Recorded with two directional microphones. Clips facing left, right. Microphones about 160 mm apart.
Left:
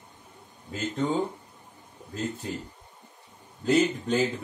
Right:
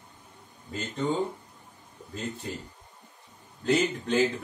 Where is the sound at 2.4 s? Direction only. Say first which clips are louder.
Left 2 dB; centre (ahead or behind).